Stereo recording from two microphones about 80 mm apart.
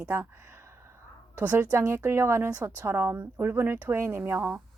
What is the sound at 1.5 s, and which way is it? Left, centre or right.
A woman's voice, right.